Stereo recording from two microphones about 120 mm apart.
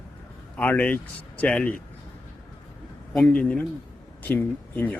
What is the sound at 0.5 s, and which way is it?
A man's voice, 15° left (ahead or behind).